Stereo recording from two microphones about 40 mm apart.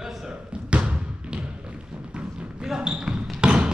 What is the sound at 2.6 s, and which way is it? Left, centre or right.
Basketball bounce, centre.